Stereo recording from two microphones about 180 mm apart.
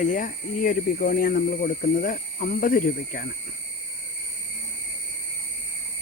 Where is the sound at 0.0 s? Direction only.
45° left (ahead or behind).